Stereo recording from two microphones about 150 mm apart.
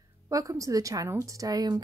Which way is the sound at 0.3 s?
20° right (ahead or behind).